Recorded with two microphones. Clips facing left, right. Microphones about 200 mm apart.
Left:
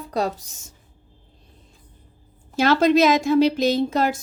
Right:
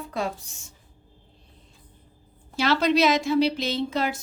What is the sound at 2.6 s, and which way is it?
A woman's voice, 45° left (ahead or behind).